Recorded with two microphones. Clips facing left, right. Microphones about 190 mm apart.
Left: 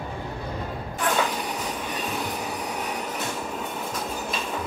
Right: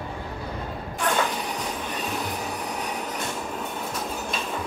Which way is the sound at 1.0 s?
Centre (ahead or behind).